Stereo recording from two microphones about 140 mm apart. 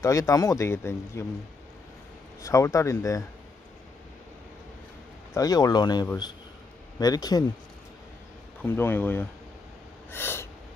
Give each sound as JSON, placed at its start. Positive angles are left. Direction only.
{"t": 0.0, "sound": "speech", "side_deg": 25}
{"t": 2.4, "sound": "speech", "side_deg": 25}
{"t": 5.3, "sound": "speech", "side_deg": 25}
{"t": 8.6, "sound": "speech", "side_deg": 15}